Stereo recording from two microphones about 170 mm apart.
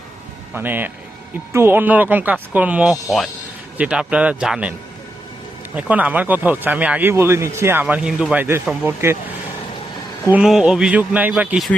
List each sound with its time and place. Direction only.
0.5 s speech: 10° right (ahead or behind)
5.7 s speech: 10° right (ahead or behind)
10.3 s speech: 5° right (ahead or behind)